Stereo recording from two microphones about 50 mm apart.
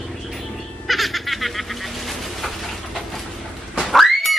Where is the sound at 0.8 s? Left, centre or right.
Centre.